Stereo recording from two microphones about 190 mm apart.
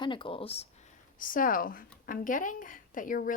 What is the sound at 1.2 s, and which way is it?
Speech, 45° left (ahead or behind).